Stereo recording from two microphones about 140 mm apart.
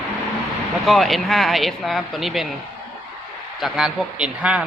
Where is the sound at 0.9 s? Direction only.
Centre (ahead or behind).